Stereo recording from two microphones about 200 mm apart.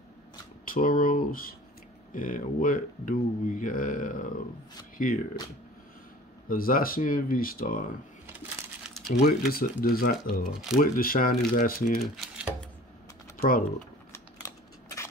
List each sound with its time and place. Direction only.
0.7 s speech: 45° left (ahead or behind)
6.5 s speech: 45° left (ahead or behind)
8.9 s a sound: centre (ahead or behind)
9.5 s speech: 45° left (ahead or behind)
12.0 s typewriter: 5° right (ahead or behind)
14.1 s a sound: 15° left (ahead or behind)